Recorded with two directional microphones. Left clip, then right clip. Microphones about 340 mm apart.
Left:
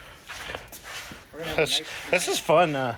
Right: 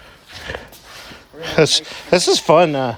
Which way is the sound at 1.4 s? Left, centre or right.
Right.